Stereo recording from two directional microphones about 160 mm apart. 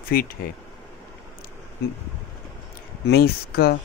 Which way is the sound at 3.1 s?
75° left (ahead or behind).